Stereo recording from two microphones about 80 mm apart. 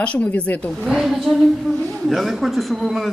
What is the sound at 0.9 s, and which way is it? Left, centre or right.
A woman's voice, centre.